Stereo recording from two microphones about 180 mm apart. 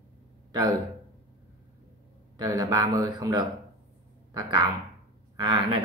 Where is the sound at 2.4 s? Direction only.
20° right (ahead or behind).